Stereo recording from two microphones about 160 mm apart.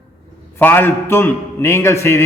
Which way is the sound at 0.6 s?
15° left (ahead or behind).